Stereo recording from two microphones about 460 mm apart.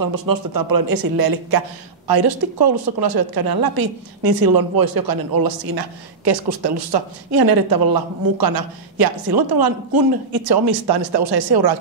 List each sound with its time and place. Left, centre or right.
0.0 s speech: right